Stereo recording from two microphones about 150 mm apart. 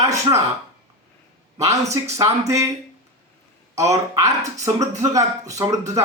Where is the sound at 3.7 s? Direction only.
20° right (ahead or behind).